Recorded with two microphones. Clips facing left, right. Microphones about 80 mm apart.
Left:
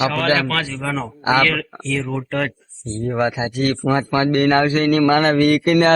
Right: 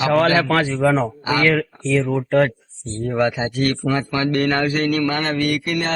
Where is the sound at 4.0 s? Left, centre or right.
Left.